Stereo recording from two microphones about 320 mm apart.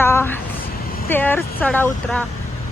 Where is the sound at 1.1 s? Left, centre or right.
Centre.